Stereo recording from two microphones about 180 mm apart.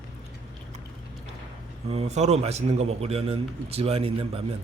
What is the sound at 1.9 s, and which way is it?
A man's voice, 35° right (ahead or behind).